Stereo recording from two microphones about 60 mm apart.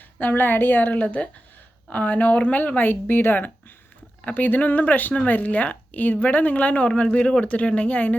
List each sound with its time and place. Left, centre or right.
0.2 s speech: left